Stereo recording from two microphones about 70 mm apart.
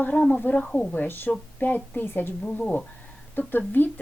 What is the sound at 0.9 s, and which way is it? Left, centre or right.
Speech, left.